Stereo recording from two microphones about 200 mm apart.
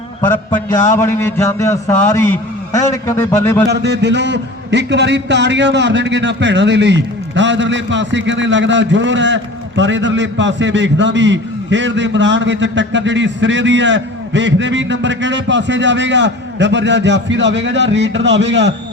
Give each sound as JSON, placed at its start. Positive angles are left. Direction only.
{"t": 0.9, "sound": "a man's voice", "side_deg": 15}
{"t": 3.7, "sound": "a man's voice", "side_deg": -60}